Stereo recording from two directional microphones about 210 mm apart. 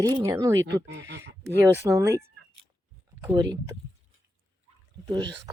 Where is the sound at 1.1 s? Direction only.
55° right (ahead or behind).